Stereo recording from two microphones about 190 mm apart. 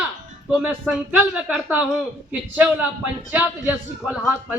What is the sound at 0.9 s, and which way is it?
A man's voice, centre (ahead or behind).